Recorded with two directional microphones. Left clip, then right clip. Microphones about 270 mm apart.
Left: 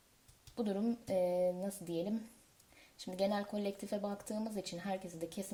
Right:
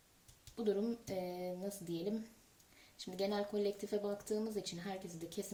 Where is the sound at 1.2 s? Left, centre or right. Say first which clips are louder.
Left 9 dB; left.